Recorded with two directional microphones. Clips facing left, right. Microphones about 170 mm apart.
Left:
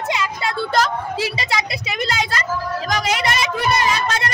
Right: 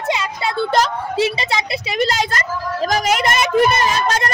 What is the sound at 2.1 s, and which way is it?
Speech, 45° right (ahead or behind).